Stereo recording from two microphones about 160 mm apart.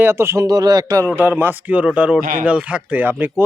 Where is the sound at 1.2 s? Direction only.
10° right (ahead or behind).